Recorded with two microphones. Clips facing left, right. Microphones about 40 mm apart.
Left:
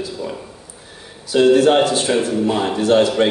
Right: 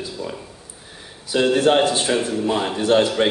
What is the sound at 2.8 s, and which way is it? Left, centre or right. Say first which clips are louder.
Speech: left 3 dB; right.